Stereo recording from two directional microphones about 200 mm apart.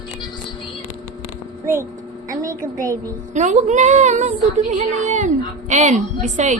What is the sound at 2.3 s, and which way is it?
Speech, 15° right (ahead or behind).